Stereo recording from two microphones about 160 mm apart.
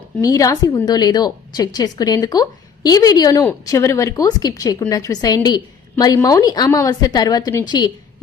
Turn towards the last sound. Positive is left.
turn(degrees=25)  # may be behind; listen again after turning